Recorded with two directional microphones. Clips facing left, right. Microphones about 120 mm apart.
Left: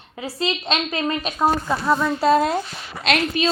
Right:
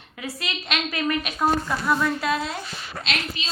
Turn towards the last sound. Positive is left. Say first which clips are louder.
# left 15 dB
turn(degrees=55)  # may be behind; listen again after turning